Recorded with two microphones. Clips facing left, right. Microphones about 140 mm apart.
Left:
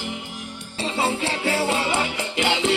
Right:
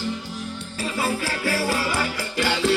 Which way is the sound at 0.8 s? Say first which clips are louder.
Left 2 dB; 25° left (ahead or behind).